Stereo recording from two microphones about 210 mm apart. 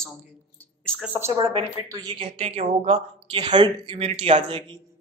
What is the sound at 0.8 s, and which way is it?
Speech, 5° right (ahead or behind).